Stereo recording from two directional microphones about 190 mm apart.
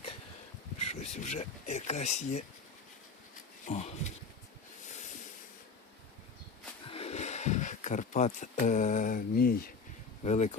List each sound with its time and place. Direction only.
0.8 s a sound: 35° left (ahead or behind)
1.2 s speech: 35° left (ahead or behind)
3.7 s speech: 35° left (ahead or behind)
6.8 s speech: 30° left (ahead or behind); by 9.7 s 50° left (ahead or behind)
10.2 s speech: 35° left (ahead or behind)